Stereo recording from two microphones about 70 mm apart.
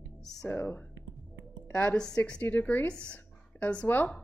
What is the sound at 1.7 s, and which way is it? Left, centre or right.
Speech, centre.